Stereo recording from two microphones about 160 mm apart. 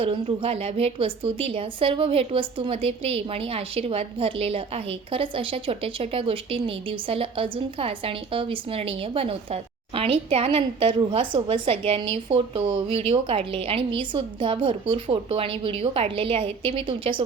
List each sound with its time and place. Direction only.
0.0 s a woman's voice: 35° right (ahead or behind)